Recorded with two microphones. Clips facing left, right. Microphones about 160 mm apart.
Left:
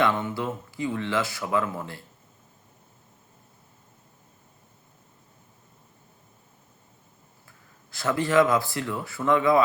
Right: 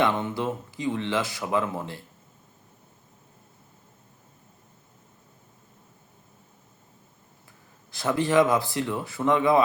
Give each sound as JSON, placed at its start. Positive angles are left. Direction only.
{"t": 0.0, "sound": "speech", "side_deg": -20}
{"t": 7.9, "sound": "speech", "side_deg": -20}